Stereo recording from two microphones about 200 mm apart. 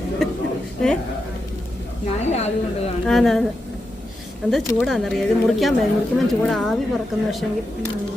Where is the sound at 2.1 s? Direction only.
35° left (ahead or behind).